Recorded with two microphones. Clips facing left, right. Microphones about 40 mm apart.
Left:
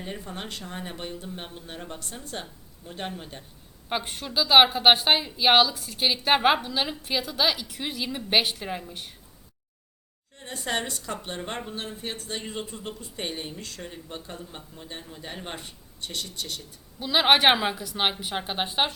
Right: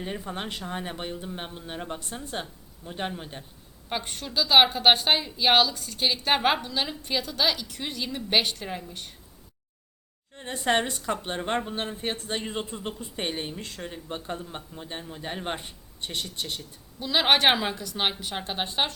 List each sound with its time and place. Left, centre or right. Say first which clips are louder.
0.0 s speech: right 3 dB; centre
3.8 s a woman's voice: left 2 dB; centre
10.3 s speech: right 5 dB; right
17.0 s a woman's voice: left 2 dB; centre